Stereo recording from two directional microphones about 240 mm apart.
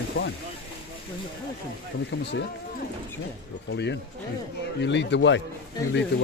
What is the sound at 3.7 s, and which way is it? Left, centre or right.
Speech, left.